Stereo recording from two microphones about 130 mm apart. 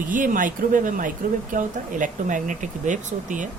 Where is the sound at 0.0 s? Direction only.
90° right; by 3.5 s 75° right (ahead or behind).